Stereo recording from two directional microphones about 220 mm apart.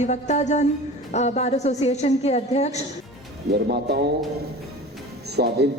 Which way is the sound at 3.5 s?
50° right (ahead or behind).